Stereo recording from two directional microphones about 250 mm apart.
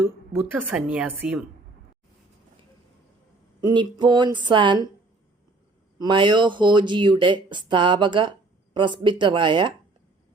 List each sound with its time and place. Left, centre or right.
0.0 s a woman's voice: centre
3.6 s speech: centre
6.0 s speech: centre